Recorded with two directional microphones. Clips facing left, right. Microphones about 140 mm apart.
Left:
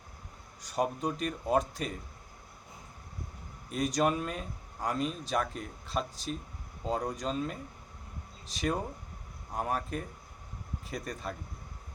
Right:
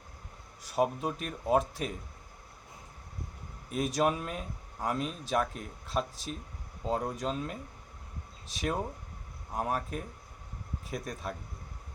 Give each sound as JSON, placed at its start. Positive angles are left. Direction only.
{"t": 0.6, "sound": "speech", "side_deg": -5}
{"t": 3.7, "sound": "speech", "side_deg": -5}